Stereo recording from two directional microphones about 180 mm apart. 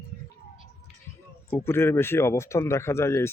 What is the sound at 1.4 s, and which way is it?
Speech, 15° left (ahead or behind).